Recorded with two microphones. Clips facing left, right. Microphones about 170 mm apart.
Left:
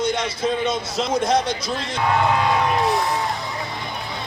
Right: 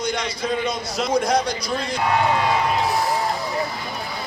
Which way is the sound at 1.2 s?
25° left (ahead or behind).